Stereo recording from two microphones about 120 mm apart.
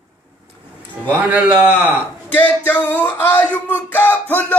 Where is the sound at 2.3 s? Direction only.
15° left (ahead or behind).